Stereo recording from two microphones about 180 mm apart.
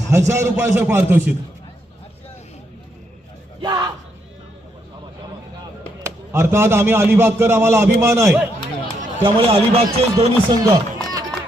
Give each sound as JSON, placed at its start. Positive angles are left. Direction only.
{"t": 0.1, "sound": "speech", "side_deg": -15}
{"t": 3.6, "sound": "speech", "side_deg": -25}
{"t": 6.0, "sound": "speech", "side_deg": -15}
{"t": 9.2, "sound": "speech", "side_deg": -30}